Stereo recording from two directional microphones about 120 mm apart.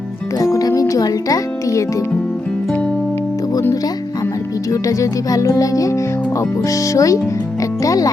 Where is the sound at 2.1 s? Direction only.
10° left (ahead or behind).